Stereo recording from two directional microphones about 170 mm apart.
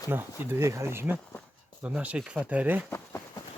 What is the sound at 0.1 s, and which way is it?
Speech, 15° right (ahead or behind).